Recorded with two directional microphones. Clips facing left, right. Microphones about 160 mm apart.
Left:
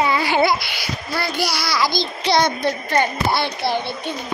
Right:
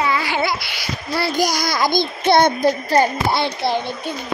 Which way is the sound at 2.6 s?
35° right (ahead or behind).